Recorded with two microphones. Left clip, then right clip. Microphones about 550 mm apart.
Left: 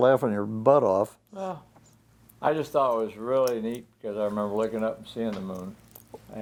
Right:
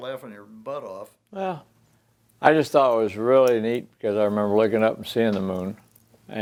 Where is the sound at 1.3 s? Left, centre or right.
Right.